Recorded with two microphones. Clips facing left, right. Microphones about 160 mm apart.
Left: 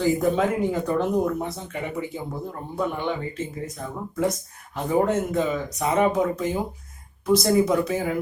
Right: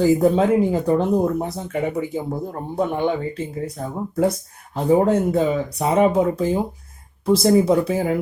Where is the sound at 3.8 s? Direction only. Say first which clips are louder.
Right 5 dB; 40° right (ahead or behind).